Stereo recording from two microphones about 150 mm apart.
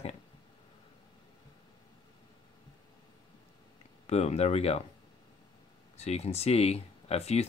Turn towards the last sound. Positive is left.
turn(degrees=45)  # may be behind; listen again after turning